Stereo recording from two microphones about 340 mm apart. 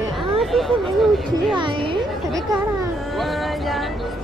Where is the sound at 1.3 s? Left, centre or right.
Centre.